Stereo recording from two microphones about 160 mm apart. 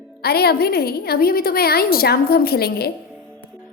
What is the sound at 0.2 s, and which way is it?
A woman's voice, 80° left.